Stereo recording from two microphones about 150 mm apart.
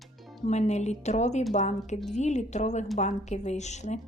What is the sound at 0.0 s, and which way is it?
Music, centre (ahead or behind).